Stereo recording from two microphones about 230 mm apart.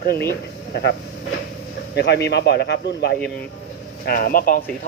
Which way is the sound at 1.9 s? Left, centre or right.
Left.